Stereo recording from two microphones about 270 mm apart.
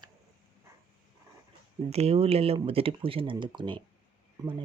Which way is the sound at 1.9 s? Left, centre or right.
Right.